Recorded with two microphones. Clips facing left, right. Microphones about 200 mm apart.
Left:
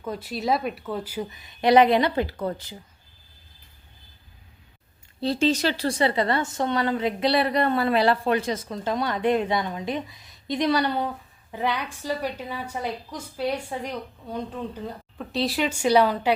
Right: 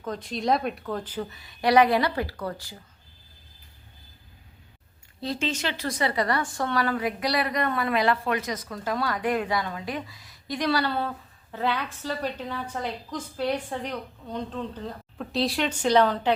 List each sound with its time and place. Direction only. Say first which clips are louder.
0.0 s a woman's voice: even; 5° left (ahead or behind)
5.2 s a woman's voice: left 7 dB; 35° left (ahead or behind); by 16.3 s 10° left (ahead or behind)